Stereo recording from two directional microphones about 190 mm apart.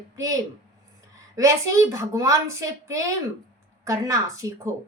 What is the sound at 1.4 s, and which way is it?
A woman's voice, 15° right (ahead or behind).